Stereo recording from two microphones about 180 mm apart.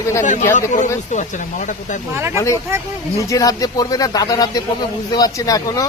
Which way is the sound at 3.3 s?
20° left (ahead or behind).